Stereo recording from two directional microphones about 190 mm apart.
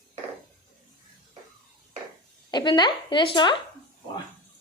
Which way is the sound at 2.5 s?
20° left (ahead or behind).